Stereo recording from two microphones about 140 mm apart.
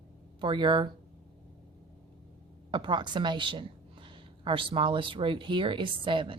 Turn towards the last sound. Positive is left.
turn(degrees=-35)  # may be behind; listen again after turning